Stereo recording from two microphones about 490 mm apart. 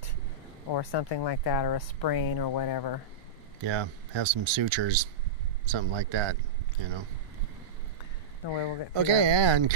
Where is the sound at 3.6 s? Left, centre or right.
Right.